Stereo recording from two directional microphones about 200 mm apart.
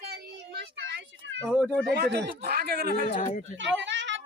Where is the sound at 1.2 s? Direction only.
65° right (ahead or behind).